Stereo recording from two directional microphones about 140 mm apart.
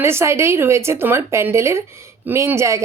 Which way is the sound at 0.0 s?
20° right (ahead or behind).